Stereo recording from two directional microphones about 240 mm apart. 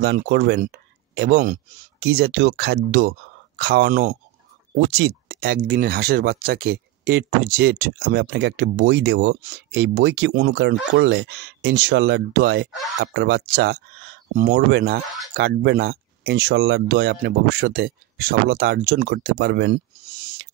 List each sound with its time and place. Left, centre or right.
0.0 s speech: right
14.7 s speech: right